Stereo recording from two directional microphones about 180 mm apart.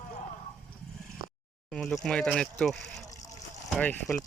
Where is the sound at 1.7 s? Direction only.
Centre (ahead or behind).